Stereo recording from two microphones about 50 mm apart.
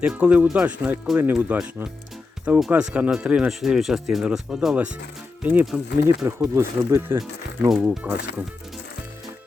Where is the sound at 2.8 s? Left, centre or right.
Right.